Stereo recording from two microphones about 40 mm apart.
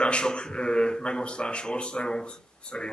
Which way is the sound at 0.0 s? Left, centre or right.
Left.